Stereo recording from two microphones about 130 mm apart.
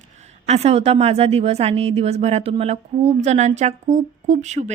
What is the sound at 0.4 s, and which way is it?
Speech, 55° right (ahead or behind).